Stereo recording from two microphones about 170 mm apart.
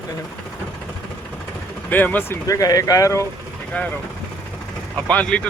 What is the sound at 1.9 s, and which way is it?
Speech, 10° left (ahead or behind).